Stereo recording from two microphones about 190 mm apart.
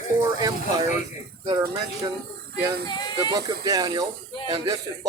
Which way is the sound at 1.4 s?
20° right (ahead or behind).